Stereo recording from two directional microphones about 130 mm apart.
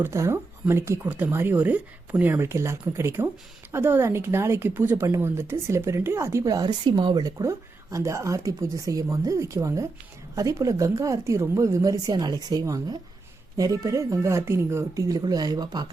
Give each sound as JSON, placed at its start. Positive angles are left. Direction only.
{"t": 0.0, "sound": "speech", "side_deg": -20}